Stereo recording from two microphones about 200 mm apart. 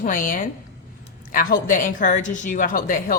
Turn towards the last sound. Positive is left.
turn(degrees=45)  # may be behind; listen again after turning